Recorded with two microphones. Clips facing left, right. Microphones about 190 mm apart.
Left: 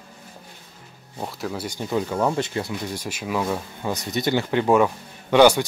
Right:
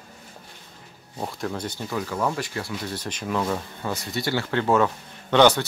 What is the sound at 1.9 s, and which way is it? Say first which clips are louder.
Speech: left 4 dB; 25° left (ahead or behind).